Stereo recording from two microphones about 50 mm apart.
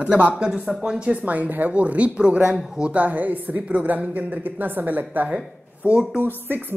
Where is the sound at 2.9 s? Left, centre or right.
Right.